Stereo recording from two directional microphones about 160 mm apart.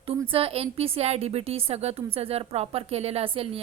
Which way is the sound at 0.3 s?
35° right (ahead or behind).